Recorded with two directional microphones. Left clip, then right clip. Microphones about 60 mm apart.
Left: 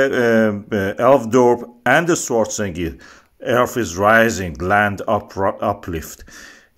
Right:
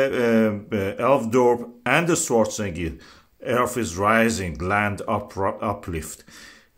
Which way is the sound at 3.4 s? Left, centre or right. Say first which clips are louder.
Left 5 dB; left.